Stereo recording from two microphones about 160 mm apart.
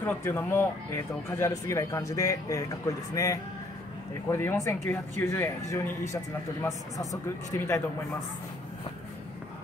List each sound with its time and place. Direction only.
0.0 s speech: 15° left (ahead or behind)